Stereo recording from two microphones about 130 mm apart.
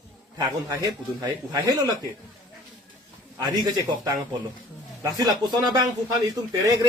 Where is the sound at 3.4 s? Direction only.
30° right (ahead or behind).